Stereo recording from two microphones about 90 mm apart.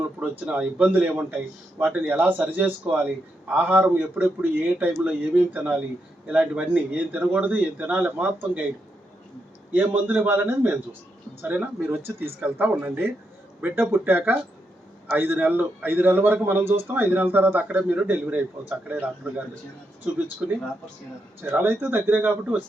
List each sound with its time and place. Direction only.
0.0 s a man's voice: 15° right (ahead or behind)
9.7 s a man's voice: 15° right (ahead or behind)
21.5 s speech: 25° right (ahead or behind)